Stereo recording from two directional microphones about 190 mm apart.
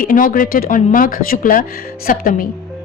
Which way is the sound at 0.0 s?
45° left (ahead or behind).